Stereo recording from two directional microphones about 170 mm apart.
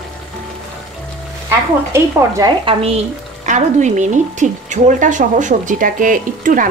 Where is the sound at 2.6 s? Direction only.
35° right (ahead or behind).